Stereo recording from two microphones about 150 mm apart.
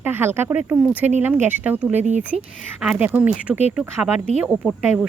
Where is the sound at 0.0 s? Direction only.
15° right (ahead or behind).